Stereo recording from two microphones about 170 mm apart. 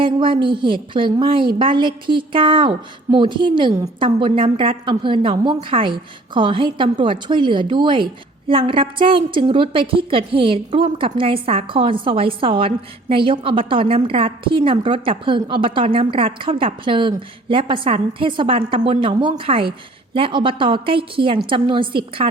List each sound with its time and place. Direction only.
0.0 s a woman's voice: 30° right (ahead or behind)